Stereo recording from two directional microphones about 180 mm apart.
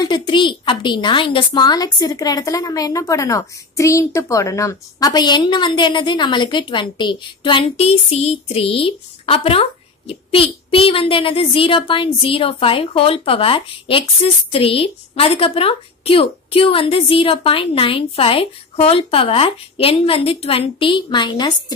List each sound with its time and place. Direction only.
0.0 s a woman's voice: 25° left (ahead or behind)